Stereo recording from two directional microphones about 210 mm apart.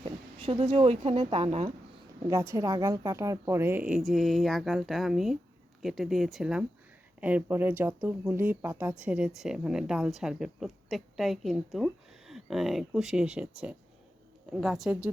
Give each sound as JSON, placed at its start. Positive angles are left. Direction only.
{"t": 0.0, "sound": "a woman's voice", "side_deg": -25}
{"t": 2.2, "sound": "a woman's voice", "side_deg": -15}